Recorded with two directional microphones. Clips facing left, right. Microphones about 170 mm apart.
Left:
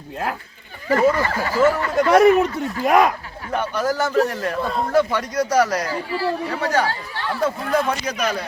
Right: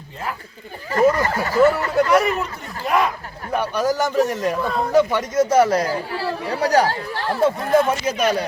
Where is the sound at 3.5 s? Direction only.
15° right (ahead or behind).